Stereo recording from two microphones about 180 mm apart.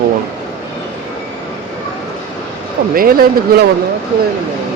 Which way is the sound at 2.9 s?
55° right (ahead or behind).